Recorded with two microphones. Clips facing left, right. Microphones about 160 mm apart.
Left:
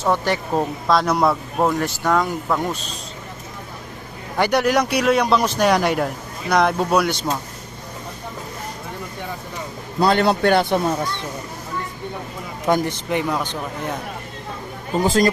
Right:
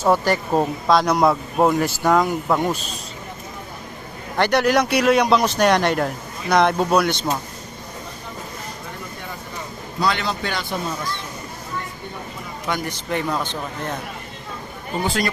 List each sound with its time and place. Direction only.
0.0 s speech: 5° right (ahead or behind)
4.4 s speech: 10° left (ahead or behind)
4.8 s speech: 5° right (ahead or behind)
5.5 s speech: 5° left (ahead or behind)
10.0 s speech: 50° left (ahead or behind)
12.8 s speech: 15° left (ahead or behind)
15.0 s speech: 40° left (ahead or behind)